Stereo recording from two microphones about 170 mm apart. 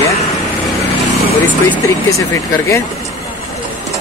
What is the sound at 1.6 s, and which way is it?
Speech, 15° left (ahead or behind).